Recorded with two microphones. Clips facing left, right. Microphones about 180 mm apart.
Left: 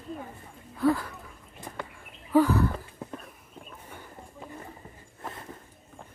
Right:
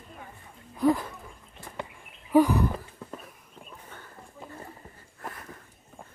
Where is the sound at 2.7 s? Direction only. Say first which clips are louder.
Left 1 dB; centre (ahead or behind).